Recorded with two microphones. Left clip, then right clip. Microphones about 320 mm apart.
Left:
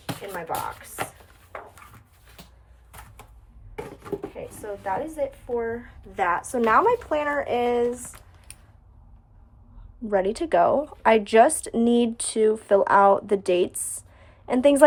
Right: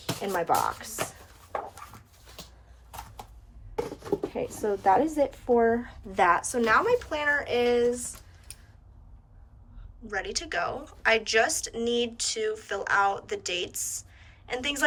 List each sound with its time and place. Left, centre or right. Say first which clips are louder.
0.0 s speech: right 4 dB; centre
4.4 s a woman's voice: right 5 dB; right
6.1 s a woman's voice: right 1 dB; centre
6.4 s speech: left 4 dB; centre
10.1 s a woman's voice: left 9 dB; centre